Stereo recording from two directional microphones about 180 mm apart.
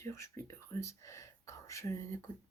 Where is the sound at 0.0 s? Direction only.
15° left (ahead or behind).